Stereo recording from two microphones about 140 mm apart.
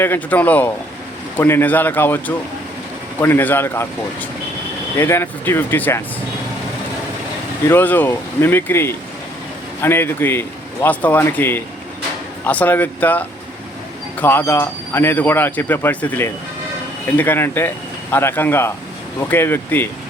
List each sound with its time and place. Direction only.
0.0 s speech: 15° left (ahead or behind)
7.7 s speech: 15° left (ahead or behind)